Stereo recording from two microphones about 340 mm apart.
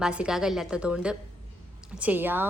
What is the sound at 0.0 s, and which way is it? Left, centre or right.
A woman's voice, centre.